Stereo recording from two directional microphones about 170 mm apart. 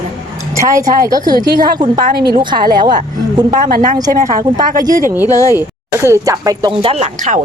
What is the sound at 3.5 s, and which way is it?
Speech, 55° right (ahead or behind).